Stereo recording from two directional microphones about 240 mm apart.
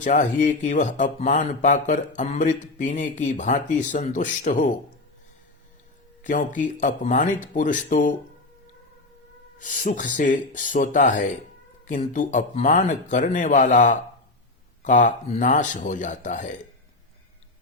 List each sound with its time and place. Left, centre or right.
0.0 s speech: left
6.2 s speech: left
9.6 s speech: left